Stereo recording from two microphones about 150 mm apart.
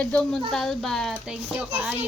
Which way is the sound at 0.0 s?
10° left (ahead or behind).